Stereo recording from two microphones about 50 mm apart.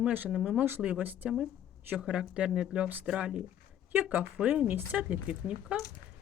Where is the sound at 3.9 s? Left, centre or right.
Right.